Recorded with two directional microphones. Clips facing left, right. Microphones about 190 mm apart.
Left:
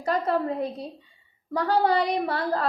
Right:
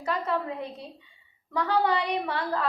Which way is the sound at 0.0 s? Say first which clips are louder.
Left 4 dB; 40° left (ahead or behind).